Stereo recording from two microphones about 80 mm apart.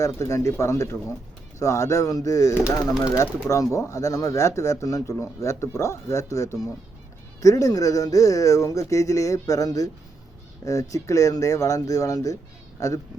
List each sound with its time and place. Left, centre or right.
0.0 s speech: left